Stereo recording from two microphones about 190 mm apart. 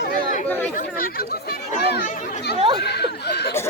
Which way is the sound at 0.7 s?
50° left (ahead or behind).